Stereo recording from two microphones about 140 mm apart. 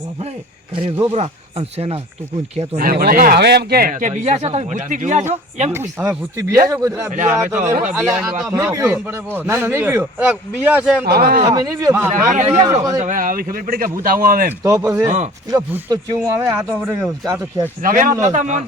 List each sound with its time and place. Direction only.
1.1 s speech: 50° right (ahead or behind)
2.7 s speech: 90° right; by 5.2 s 65° right (ahead or behind)
5.3 s speech: 50° right (ahead or behind)
6.0 s a man's voice: 20° right (ahead or behind)
11.1 s speech: 90° right
11.4 s speech: 30° right (ahead or behind)
11.9 s a man's voice: 15° right (ahead or behind)
12.3 s speech: 55° right (ahead or behind)
13.0 s speech: 70° right (ahead or behind); by 14.5 s 90° right
14.6 s a man's voice: 25° right (ahead or behind)
17.8 s speech: 75° right (ahead or behind)
18.2 s speech: 60° right (ahead or behind)